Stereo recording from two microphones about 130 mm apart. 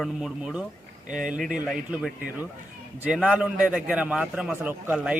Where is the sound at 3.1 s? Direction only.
5° right (ahead or behind).